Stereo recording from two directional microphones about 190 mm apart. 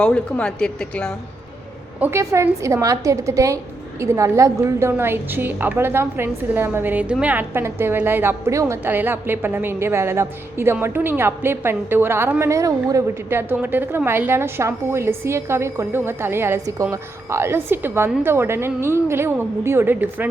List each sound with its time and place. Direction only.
0.0 s speech: 5° left (ahead or behind)
2.0 s a woman's voice: 15° right (ahead or behind)